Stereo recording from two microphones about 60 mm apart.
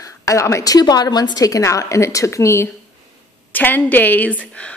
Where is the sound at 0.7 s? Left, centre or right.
Left.